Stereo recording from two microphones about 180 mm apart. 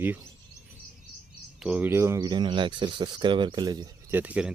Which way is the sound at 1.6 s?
10° right (ahead or behind).